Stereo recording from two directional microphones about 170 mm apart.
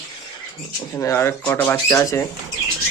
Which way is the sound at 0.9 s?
15° left (ahead or behind).